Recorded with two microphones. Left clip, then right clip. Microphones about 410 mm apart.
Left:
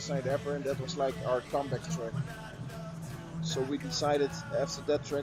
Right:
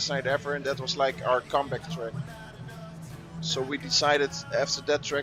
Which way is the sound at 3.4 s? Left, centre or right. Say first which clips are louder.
Right 4 dB; centre.